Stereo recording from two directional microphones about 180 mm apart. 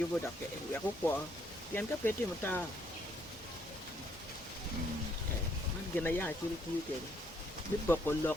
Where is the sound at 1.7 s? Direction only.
10° left (ahead or behind).